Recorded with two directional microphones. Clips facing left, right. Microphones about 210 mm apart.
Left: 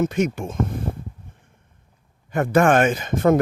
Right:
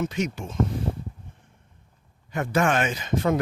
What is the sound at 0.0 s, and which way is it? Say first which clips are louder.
Speech: left 6 dB; 50° left (ahead or behind).